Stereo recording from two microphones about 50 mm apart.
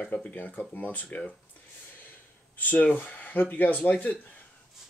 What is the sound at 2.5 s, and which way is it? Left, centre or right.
Speech, left.